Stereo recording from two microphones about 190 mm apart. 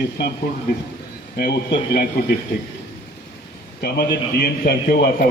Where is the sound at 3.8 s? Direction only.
55° left (ahead or behind).